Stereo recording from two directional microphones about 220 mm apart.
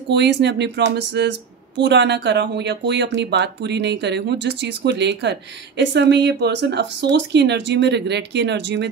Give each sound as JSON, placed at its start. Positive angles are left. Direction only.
{"t": 0.1, "sound": "speech", "side_deg": -50}